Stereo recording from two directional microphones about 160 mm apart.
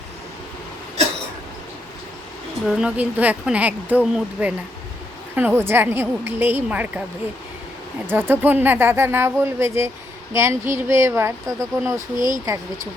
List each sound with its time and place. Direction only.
2.6 s speech: 5° right (ahead or behind)
8.0 s speech: 15° right (ahead or behind)